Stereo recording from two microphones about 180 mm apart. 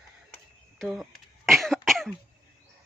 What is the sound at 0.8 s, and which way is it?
Speech, centre (ahead or behind).